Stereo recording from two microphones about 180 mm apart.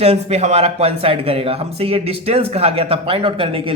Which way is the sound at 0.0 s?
35° right (ahead or behind).